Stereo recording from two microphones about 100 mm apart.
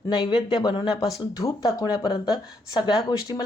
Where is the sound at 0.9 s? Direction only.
35° left (ahead or behind).